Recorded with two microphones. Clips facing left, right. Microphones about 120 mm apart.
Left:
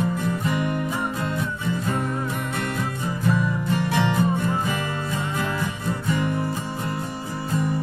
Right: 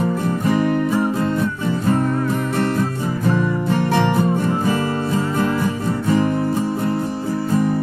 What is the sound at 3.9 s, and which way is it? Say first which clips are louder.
Music: right 5 dB; 50° right (ahead or behind).